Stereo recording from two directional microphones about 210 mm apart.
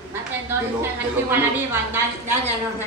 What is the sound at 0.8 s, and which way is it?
A man's voice, 10° right (ahead or behind).